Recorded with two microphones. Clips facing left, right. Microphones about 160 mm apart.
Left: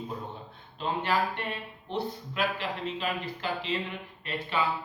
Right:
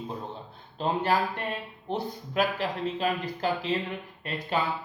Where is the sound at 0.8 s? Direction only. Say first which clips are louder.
Right 3 dB; 35° right (ahead or behind).